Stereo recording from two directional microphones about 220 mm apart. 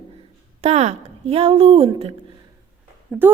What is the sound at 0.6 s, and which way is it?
A woman's voice, 30° right (ahead or behind).